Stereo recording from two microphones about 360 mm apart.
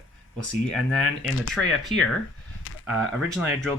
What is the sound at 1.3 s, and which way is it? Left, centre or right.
Speech, left.